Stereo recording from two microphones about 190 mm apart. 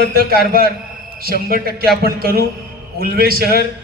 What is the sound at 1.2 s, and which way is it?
A man's voice, 50° right (ahead or behind).